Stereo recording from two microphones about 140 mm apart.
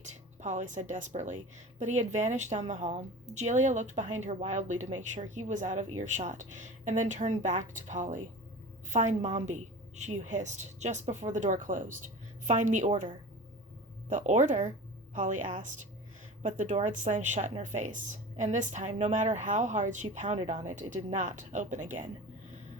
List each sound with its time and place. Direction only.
0.0 s a woman's voice: 60° right (ahead or behind)
14.1 s a woman's voice: 60° right (ahead or behind)